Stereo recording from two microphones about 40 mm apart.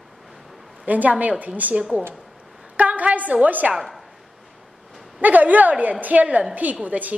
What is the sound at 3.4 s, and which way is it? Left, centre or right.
Speech, right.